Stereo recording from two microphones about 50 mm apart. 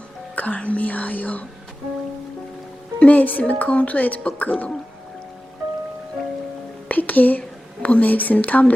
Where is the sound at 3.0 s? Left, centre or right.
Left.